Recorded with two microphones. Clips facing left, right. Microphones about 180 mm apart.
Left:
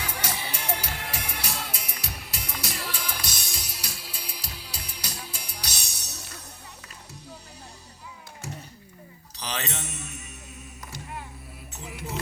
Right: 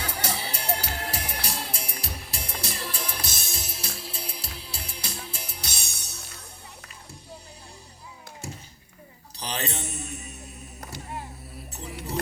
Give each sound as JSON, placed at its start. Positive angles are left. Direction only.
{"t": 0.0, "sound": "music", "side_deg": -35}
{"t": 9.4, "sound": "mantra", "side_deg": -35}